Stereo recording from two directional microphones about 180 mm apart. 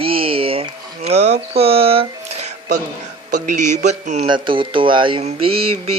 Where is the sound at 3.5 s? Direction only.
40° right (ahead or behind).